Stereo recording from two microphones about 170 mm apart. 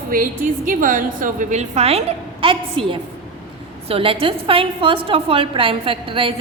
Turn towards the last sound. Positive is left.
turn(degrees=-30)  # may be behind; listen again after turning